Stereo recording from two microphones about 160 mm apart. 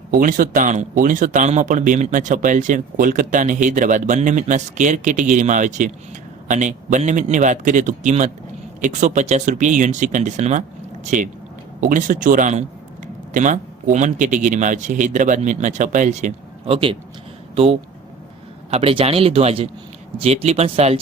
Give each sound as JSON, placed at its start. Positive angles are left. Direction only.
{"t": 0.1, "sound": "speech", "side_deg": -55}